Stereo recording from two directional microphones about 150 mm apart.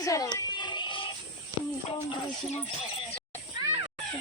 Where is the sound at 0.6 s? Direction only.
30° left (ahead or behind).